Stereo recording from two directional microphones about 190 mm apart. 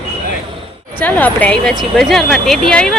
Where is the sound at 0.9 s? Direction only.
10° left (ahead or behind).